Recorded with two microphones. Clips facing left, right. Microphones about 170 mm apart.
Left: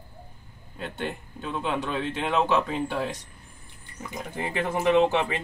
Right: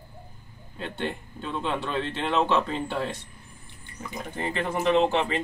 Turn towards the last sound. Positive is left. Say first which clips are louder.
# left 1 dB
turn(degrees=10)  # may be behind; listen again after turning